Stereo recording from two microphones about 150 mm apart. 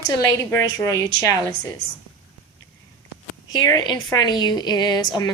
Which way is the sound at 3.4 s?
25° left (ahead or behind).